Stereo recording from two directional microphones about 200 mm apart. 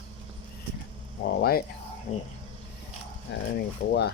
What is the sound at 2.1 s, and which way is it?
Speech, 40° left (ahead or behind).